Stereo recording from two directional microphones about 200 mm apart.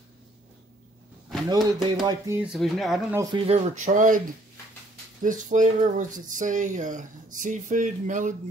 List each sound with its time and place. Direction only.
1.5 s speech: 20° right (ahead or behind); by 3.2 s centre (ahead or behind)
3.4 s speech: 35° right (ahead or behind)
5.2 s speech: 40° right (ahead or behind)